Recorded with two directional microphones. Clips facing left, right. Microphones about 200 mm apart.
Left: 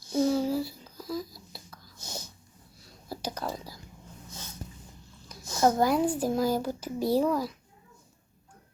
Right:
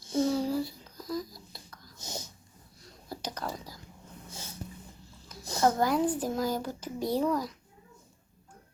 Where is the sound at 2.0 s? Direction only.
20° right (ahead or behind).